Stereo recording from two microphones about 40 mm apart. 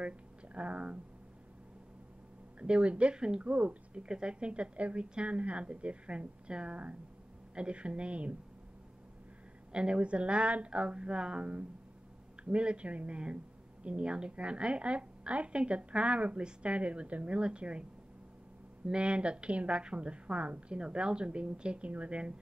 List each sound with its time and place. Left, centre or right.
0.6 s a woman's voice: right
2.6 s a woman's voice: right
3.4 s a woman's voice: right
9.7 s a woman's voice: right
18.9 s a woman's voice: right